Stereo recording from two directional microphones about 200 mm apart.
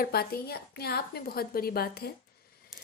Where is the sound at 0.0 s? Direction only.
50° left (ahead or behind).